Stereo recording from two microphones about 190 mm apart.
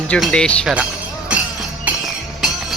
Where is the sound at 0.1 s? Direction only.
5° left (ahead or behind).